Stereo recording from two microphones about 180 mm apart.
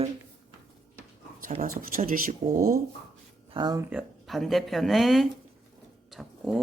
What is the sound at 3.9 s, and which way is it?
Speech, 5° right (ahead or behind).